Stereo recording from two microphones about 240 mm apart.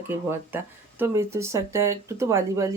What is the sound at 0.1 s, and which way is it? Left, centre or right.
Speech, centre.